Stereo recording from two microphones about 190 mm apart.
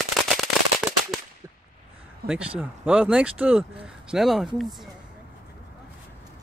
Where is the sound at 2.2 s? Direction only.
55° right (ahead or behind).